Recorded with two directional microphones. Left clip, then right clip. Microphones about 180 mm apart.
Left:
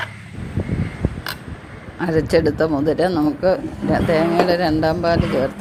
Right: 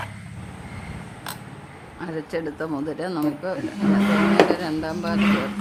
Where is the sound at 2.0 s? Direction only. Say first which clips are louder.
Left 12 dB; 30° left (ahead or behind).